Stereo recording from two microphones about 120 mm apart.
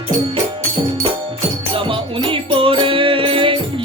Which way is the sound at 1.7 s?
45° right (ahead or behind).